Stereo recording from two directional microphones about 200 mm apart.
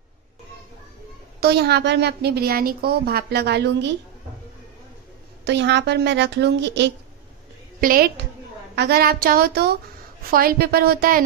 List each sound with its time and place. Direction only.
1.4 s a woman's voice: 55° right (ahead or behind)
5.4 s a woman's voice: 60° right (ahead or behind)
7.8 s speech: 45° right (ahead or behind)